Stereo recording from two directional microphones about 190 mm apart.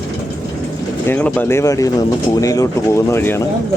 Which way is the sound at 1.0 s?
10° left (ahead or behind).